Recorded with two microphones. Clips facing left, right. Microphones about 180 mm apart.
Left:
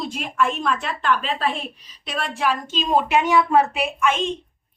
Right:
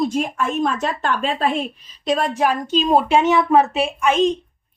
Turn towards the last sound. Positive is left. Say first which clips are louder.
# right 5 dB
turn(degrees=-35)  # may be behind; listen again after turning